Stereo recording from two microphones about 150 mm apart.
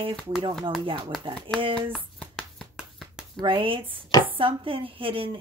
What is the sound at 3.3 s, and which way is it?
Speech, 35° right (ahead or behind).